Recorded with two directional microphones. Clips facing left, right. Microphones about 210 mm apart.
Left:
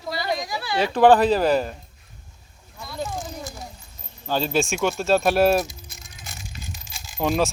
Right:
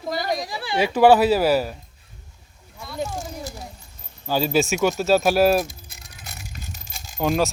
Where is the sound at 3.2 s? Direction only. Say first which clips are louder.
Right 1 dB; 40° right (ahead or behind).